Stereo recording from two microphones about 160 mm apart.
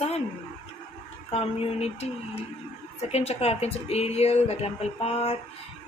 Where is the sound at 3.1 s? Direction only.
40° left (ahead or behind).